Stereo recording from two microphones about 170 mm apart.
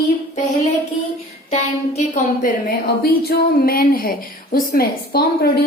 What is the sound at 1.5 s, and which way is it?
A woman's voice, 40° left (ahead or behind).